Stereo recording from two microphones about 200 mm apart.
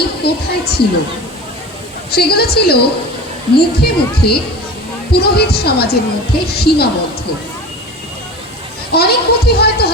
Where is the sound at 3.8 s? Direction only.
50° left (ahead or behind).